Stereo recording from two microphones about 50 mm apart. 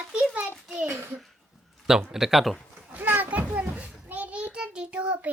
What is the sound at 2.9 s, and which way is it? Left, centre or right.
Children playing, right.